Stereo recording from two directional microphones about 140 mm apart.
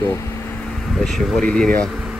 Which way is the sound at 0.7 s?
5° left (ahead or behind).